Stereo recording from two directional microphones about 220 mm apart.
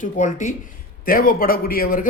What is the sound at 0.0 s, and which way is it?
Speech, 35° left (ahead or behind).